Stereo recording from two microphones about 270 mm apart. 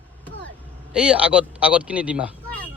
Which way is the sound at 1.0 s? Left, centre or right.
Centre.